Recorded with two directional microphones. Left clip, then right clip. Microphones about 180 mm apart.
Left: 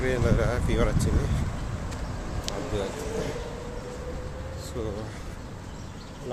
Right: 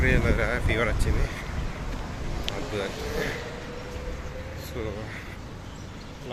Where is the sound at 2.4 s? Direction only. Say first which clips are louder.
Even; 15° left (ahead or behind).